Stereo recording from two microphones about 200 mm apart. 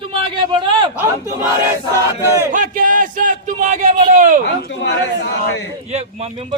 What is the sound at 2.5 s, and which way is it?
A man's voice, 40° right (ahead or behind).